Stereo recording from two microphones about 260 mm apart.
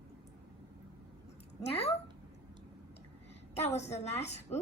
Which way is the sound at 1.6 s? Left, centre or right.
Left.